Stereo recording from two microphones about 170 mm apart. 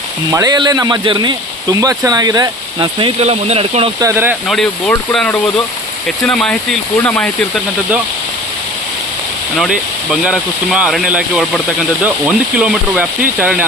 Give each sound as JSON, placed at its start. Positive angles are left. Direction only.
{"t": 0.3, "sound": "speech", "side_deg": -20}
{"t": 4.0, "sound": "speech", "side_deg": -15}
{"t": 4.4, "sound": "speech", "side_deg": 0}
{"t": 9.6, "sound": "speech", "side_deg": -5}